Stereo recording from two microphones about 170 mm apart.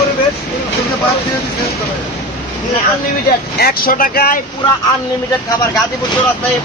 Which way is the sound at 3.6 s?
60° left (ahead or behind).